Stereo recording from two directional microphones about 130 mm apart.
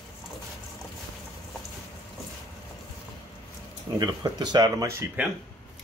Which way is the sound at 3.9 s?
30° right (ahead or behind).